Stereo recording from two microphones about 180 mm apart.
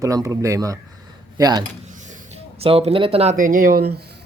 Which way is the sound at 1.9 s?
45° right (ahead or behind).